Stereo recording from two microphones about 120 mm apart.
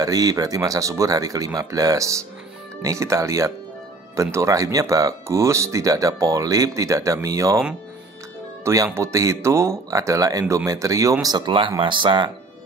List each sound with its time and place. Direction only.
0.0 s speech: 30° right (ahead or behind)
8.9 s speech: 25° right (ahead or behind); by 12.3 s 40° right (ahead or behind)